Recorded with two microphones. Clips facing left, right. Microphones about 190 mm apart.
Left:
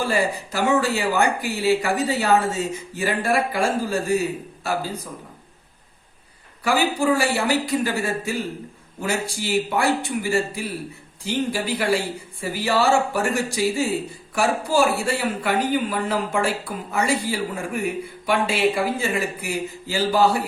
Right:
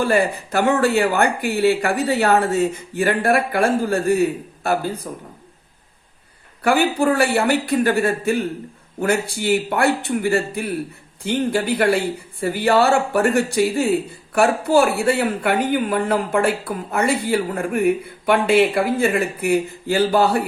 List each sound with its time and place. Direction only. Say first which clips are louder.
0.0 s speech: right 4 dB; 55° right (ahead or behind)
6.6 s speech: right 4 dB; 60° right (ahead or behind)